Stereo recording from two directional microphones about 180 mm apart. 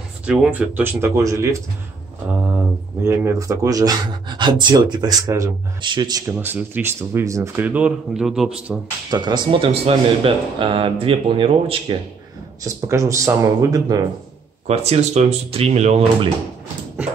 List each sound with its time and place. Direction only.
0.3 s speech: 5° right (ahead or behind)
3.0 s speech: 15° right (ahead or behind)
6.3 s speech: 10° right (ahead or behind)
9.1 s speech: 25° right (ahead or behind)
12.6 s speech: 15° right (ahead or behind)
14.7 s speech: 35° right (ahead or behind)